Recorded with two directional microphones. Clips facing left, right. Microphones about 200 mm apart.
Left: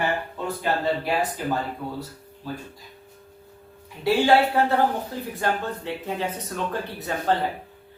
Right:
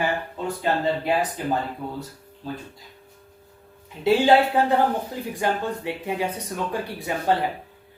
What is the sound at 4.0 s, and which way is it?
Speech, 20° right (ahead or behind).